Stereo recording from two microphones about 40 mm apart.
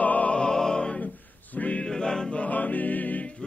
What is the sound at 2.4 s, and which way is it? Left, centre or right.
Music, left.